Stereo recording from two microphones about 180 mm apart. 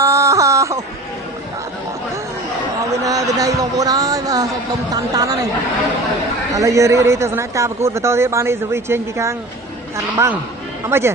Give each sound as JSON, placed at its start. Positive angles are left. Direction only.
{"t": 0.0, "sound": "wail", "side_deg": -15}
{"t": 2.9, "sound": "a man's voice", "side_deg": -20}
{"t": 6.5, "sound": "speech", "side_deg": -20}